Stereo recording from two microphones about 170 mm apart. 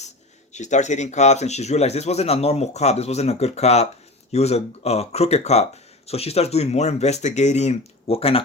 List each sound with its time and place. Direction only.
0.5 s speech: 45° left (ahead or behind)